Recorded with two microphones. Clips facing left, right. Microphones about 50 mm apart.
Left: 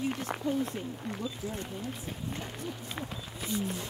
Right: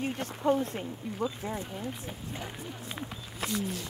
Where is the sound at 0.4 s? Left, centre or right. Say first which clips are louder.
Right 8 dB; right.